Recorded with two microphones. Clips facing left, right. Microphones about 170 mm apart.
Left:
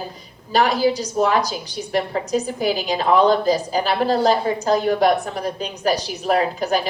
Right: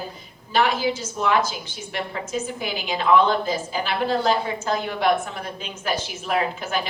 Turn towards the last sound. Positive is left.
turn(degrees=40)  # may be behind; listen again after turning